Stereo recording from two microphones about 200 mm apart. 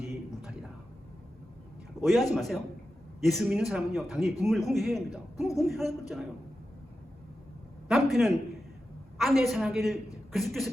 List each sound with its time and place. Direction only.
2.0 s a man's voice: centre (ahead or behind)
7.9 s a man's voice: centre (ahead or behind)